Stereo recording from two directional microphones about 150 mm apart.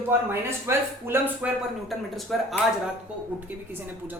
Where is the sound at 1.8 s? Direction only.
Centre (ahead or behind).